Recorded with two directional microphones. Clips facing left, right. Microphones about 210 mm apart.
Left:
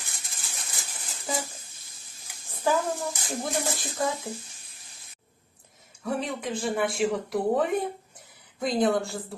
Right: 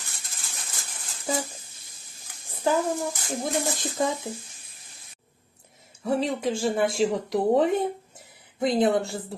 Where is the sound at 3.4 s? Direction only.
20° right (ahead or behind).